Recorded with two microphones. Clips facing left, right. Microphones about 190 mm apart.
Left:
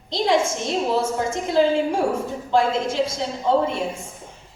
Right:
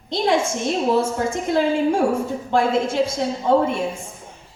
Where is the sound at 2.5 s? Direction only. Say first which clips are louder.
Right 1 dB; 55° right (ahead or behind).